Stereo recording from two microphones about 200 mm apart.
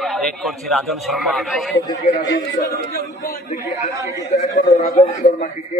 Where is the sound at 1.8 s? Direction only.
15° left (ahead or behind).